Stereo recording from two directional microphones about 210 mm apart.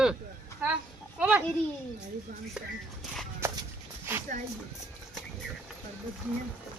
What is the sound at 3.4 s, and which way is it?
Walk, 10° right (ahead or behind).